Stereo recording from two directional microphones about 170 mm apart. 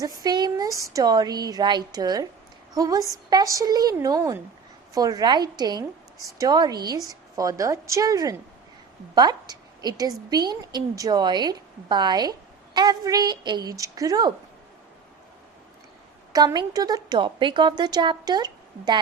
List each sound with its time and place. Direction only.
0.0 s a woman's voice: 20° right (ahead or behind)
16.3 s a woman's voice: 25° right (ahead or behind)